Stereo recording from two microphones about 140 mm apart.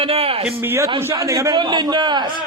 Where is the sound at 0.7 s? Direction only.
20° right (ahead or behind).